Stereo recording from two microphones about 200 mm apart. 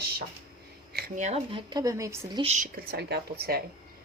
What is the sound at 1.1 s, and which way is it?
Speech, 35° right (ahead or behind).